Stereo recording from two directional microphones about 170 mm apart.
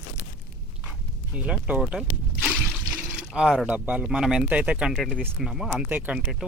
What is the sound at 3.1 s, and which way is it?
Speech, 5° right (ahead or behind).